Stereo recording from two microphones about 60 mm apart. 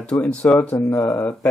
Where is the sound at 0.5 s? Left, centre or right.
Left.